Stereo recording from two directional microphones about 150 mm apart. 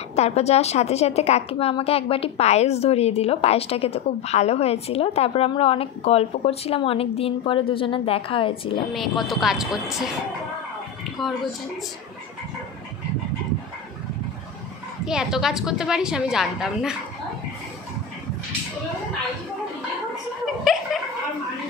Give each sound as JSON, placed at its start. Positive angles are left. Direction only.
{"t": 0.1, "sound": "a woman's voice", "side_deg": 45}
{"t": 8.9, "sound": "a woman's voice", "side_deg": 0}
{"t": 11.2, "sound": "a woman's voice", "side_deg": 0}
{"t": 15.0, "sound": "a woman's voice", "side_deg": -5}